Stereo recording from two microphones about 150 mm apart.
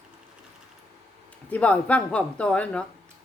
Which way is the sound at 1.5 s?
10° left (ahead or behind).